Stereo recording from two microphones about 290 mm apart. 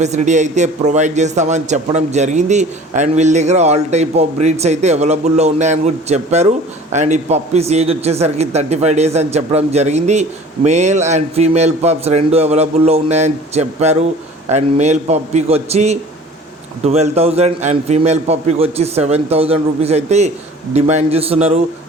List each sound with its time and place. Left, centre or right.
0.0 s a man's voice: right